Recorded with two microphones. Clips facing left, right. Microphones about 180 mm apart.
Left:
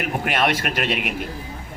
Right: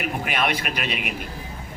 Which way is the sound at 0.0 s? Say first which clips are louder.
Left 3 dB; 50° left (ahead or behind).